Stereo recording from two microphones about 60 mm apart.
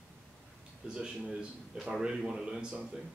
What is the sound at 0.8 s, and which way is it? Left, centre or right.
A man's voice, centre.